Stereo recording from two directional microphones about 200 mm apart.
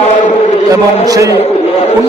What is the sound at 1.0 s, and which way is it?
Speech, 20° right (ahead or behind).